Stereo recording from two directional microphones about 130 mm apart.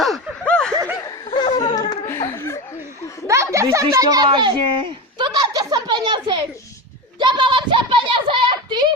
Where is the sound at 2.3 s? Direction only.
20° left (ahead or behind).